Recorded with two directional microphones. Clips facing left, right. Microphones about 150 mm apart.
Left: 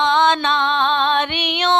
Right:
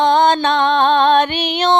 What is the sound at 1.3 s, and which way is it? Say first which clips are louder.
Music: right 4 dB; 40° right (ahead or behind).